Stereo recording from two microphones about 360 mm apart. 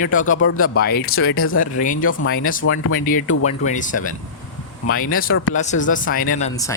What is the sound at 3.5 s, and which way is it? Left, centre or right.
Speech, centre.